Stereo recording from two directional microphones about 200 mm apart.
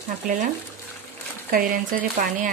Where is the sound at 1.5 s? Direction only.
45° right (ahead or behind).